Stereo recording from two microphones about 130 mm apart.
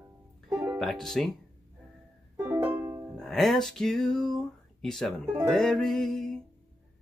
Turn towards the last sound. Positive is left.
turn(degrees=0)  # may be behind; listen again after turning